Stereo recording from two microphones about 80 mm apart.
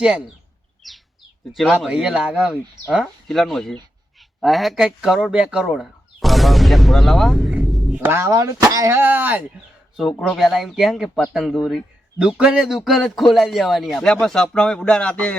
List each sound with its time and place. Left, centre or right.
0.8 s a man's voice: centre
3.0 s a man's voice: centre
7.5 s a sound: centre
8.1 s speech: right
8.4 s speech: right
9.0 s speech: right
10.0 s a man's voice: centre